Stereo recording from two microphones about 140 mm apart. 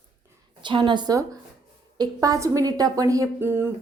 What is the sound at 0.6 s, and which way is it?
A woman's voice, 35° right (ahead or behind).